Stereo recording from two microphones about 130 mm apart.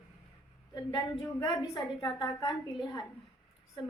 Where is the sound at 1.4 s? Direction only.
40° left (ahead or behind).